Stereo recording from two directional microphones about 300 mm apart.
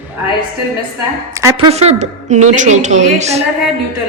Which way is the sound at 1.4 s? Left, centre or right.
Centre.